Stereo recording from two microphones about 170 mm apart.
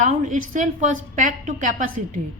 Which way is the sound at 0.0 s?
50° right (ahead or behind).